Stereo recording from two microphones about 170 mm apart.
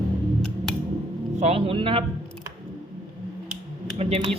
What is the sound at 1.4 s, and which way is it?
Speech, 35° right (ahead or behind).